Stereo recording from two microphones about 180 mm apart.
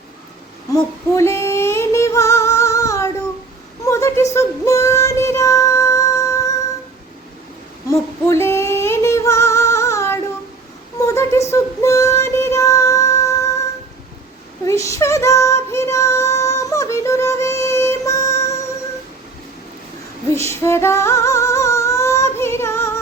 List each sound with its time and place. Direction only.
0.7 s female singing: 15° left (ahead or behind)
8.3 s female singing: 15° left (ahead or behind)
11.0 s a sound: 15° left (ahead or behind)
11.5 s music: 15° left (ahead or behind)
14.6 s female singing: 15° left (ahead or behind)
20.5 s female singing: 15° left (ahead or behind)